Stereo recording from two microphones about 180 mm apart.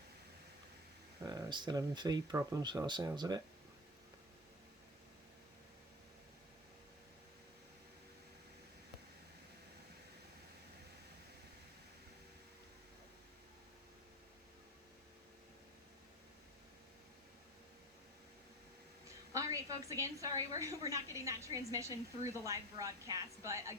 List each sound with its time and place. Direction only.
1.2 s speech: 20° right (ahead or behind)
19.0 s a woman's voice: 15° right (ahead or behind)